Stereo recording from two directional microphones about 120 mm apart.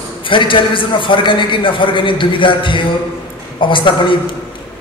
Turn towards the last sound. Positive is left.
turn(degrees=45)  # may be behind; listen again after turning